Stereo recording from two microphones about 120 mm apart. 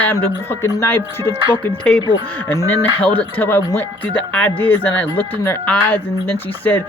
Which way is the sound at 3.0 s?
15° left (ahead or behind).